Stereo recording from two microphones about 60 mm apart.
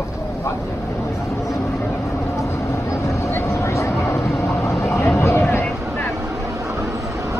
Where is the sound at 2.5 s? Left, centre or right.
Left.